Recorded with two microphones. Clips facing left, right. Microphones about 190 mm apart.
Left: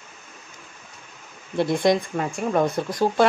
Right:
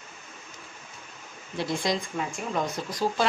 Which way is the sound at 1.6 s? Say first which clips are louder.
Left 8 dB; 55° left (ahead or behind).